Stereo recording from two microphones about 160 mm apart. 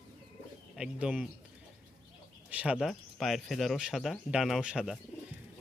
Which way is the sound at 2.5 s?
5° right (ahead or behind).